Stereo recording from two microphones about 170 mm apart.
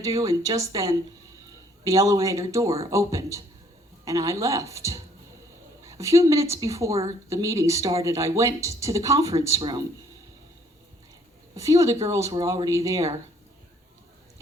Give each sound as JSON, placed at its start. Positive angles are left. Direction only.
{"t": 0.2, "sound": "a woman's voice", "side_deg": -20}
{"t": 11.5, "sound": "a woman's voice", "side_deg": -20}